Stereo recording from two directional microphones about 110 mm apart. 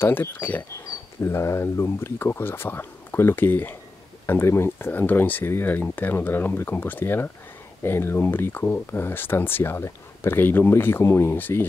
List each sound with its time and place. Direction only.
0.0 s speech: 20° left (ahead or behind)